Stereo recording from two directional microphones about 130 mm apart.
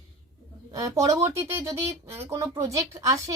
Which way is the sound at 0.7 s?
25° right (ahead or behind).